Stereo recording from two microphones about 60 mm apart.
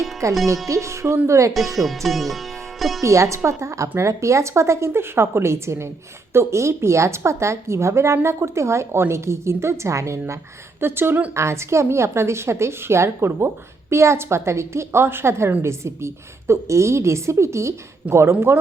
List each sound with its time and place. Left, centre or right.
0.2 s speech: right
1.8 s speech: centre
3.0 s a woman's voice: right
10.8 s speech: right
11.3 s a woman's voice: right